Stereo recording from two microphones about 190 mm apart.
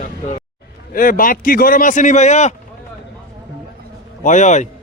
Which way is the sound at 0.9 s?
45° left (ahead or behind).